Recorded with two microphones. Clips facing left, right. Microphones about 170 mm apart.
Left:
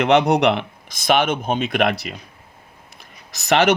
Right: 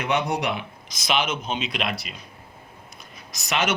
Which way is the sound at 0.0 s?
80° left.